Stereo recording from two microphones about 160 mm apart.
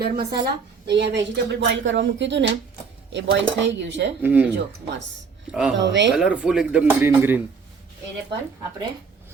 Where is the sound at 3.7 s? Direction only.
90° right.